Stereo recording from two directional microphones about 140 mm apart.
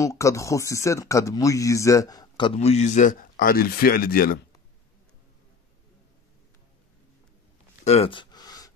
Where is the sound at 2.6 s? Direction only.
50° left (ahead or behind); by 4.3 s 90° left.